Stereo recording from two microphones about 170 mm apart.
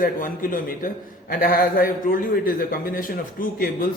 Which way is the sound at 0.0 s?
55° left (ahead or behind).